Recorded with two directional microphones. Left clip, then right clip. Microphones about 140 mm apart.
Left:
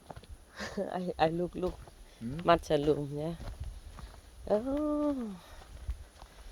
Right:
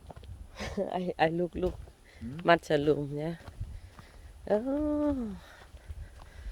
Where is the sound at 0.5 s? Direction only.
45° right (ahead or behind).